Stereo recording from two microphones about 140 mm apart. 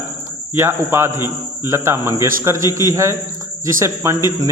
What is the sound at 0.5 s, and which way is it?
A man's voice, 15° right (ahead or behind).